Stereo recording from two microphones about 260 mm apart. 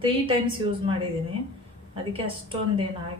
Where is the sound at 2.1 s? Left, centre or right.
Centre.